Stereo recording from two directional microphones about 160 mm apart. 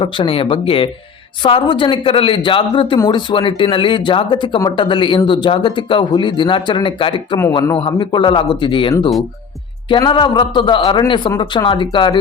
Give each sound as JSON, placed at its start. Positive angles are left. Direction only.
{"t": 0.0, "sound": "speech", "side_deg": 35}
{"t": 9.9, "sound": "a man's voice", "side_deg": 30}